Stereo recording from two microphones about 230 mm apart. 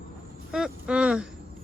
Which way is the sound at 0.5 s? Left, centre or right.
Centre.